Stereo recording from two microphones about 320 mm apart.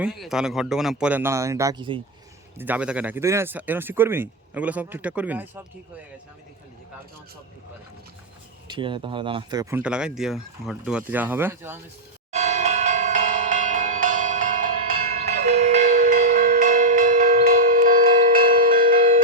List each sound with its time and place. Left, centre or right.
0.0 s speech: centre
8.6 s speech: centre
12.3 s bell: right